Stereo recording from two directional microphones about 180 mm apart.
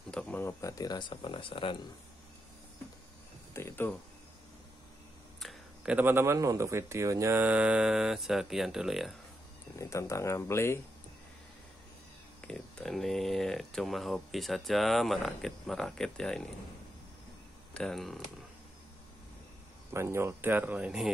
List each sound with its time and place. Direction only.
0.1 s speech: 5° left (ahead or behind); by 1.8 s 30° left (ahead or behind)
3.5 s speech: 15° left (ahead or behind)
5.4 s speech: 5° right (ahead or behind)
9.8 s speech: 15° left (ahead or behind)
12.4 s speech: 5° left (ahead or behind)
17.7 s speech: centre (ahead or behind)
19.9 s speech: 15° right (ahead or behind)